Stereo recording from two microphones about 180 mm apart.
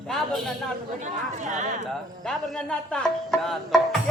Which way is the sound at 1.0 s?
40° right (ahead or behind).